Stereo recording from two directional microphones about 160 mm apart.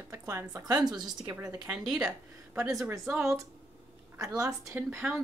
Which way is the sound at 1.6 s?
5° right (ahead or behind).